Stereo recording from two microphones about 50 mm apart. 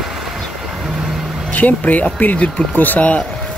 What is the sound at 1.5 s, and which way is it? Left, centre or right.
Speech, left.